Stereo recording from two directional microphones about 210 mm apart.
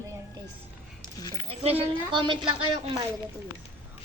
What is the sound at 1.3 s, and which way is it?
A woman's voice, 25° right (ahead or behind).